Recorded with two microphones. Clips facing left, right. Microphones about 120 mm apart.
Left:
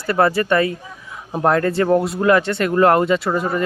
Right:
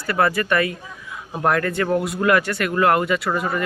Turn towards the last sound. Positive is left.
turn(degrees=30)  # may be behind; listen again after turning